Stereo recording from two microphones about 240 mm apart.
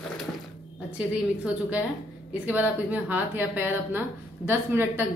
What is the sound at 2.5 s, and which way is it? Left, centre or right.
Speech, centre.